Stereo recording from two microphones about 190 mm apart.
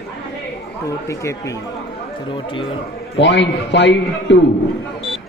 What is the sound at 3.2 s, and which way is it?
A man's voice, 70° left (ahead or behind).